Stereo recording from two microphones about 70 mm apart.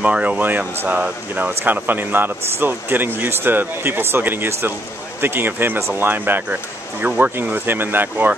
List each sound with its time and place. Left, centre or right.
0.0 s speech: centre